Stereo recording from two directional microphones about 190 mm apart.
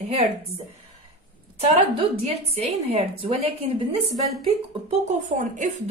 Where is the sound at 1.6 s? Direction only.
30° right (ahead or behind).